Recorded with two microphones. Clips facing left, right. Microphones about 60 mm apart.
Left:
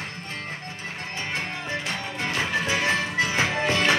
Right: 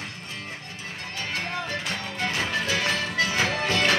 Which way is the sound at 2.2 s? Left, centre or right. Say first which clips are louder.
Left 1 dB; left.